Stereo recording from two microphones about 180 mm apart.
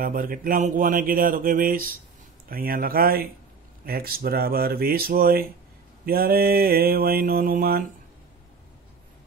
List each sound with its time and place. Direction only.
0.0 s speech: 50° right (ahead or behind)
2.5 s mantra: 55° right (ahead or behind)